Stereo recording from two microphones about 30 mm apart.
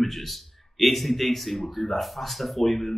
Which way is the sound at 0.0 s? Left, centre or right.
Centre.